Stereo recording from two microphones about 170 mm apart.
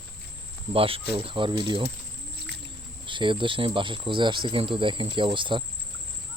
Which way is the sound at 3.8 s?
30° right (ahead or behind).